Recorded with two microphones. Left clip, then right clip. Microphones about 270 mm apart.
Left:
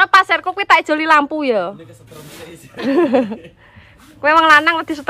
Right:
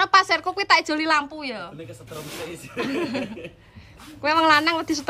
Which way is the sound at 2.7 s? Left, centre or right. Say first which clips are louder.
Left 13 dB; centre.